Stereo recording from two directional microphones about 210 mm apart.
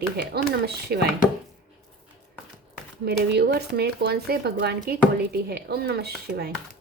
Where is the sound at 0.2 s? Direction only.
50° right (ahead or behind).